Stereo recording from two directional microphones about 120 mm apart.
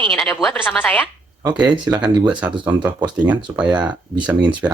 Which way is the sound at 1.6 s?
35° right (ahead or behind).